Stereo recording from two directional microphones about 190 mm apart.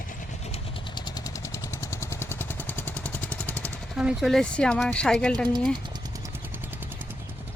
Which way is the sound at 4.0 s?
Centre (ahead or behind).